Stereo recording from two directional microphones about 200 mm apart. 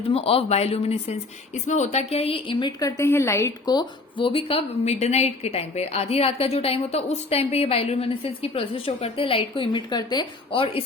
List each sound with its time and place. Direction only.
0.1 s speech: 30° left (ahead or behind)